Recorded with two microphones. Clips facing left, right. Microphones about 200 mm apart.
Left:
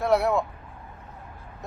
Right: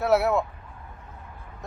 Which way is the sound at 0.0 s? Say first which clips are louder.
Right 1 dB; 5° right (ahead or behind).